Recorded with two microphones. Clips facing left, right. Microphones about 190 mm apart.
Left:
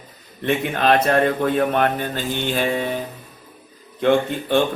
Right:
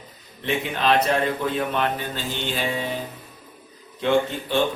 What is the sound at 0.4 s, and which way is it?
Speech, 55° left (ahead or behind).